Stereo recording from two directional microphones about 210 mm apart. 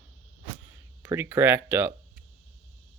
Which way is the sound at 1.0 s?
10° right (ahead or behind).